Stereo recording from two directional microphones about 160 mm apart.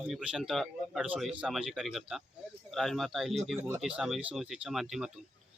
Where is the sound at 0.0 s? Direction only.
5° right (ahead or behind).